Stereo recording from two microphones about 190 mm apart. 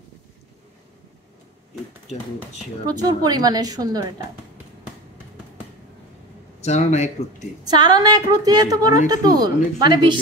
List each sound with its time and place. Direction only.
2.9 s a woman's voice: 20° right (ahead or behind)
6.6 s speech: 35° left (ahead or behind)
7.6 s a woman's voice: 20° right (ahead or behind)